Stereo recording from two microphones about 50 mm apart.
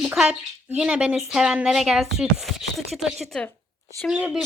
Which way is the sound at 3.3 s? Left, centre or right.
Centre.